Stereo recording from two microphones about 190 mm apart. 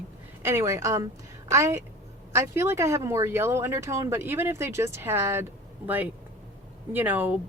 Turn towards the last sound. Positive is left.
turn(degrees=-10)  # may be behind; listen again after turning